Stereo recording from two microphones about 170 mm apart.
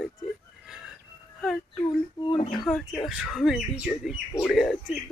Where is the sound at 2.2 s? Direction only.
30° left (ahead or behind).